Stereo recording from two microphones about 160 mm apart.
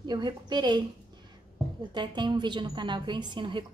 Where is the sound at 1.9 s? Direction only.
30° right (ahead or behind).